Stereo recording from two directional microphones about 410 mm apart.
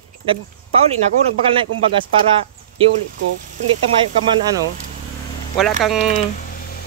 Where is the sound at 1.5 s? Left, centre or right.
Centre.